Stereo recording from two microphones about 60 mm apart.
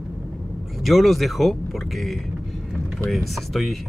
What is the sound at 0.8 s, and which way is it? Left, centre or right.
Speech, centre.